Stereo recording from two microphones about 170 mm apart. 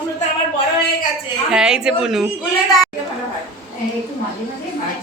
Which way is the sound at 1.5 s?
5° right (ahead or behind).